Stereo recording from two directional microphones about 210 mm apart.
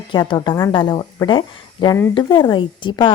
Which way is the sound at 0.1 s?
20° left (ahead or behind).